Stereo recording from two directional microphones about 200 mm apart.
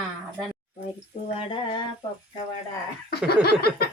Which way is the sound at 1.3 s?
20° left (ahead or behind).